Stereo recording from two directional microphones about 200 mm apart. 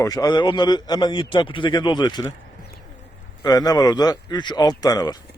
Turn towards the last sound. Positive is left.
turn(degrees=20)  # may be behind; listen again after turning